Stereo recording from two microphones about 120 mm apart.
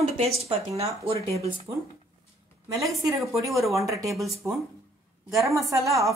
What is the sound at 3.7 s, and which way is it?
Speech, 25° right (ahead or behind).